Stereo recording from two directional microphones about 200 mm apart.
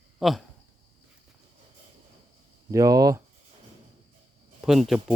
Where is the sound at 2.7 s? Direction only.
15° right (ahead or behind).